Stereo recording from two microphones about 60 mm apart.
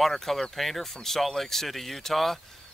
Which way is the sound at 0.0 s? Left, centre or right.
Centre.